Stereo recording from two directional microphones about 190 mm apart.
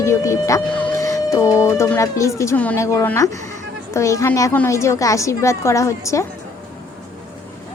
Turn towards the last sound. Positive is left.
turn(degrees=15)  # may be behind; listen again after turning